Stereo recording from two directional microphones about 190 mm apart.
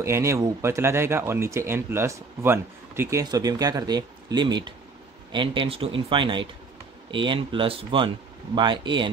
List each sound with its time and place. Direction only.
0.0 s a man's voice: 15° right (ahead or behind)